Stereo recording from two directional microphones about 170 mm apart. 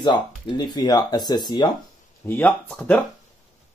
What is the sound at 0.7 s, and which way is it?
Speech, 25° left (ahead or behind).